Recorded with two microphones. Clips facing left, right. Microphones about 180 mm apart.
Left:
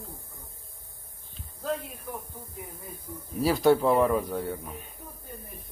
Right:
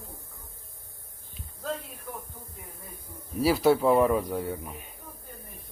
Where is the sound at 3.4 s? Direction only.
5° right (ahead or behind).